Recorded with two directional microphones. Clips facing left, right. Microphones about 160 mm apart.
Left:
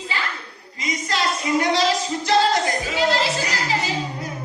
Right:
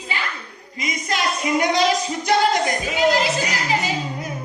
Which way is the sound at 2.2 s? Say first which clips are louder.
Even; 20° right (ahead or behind).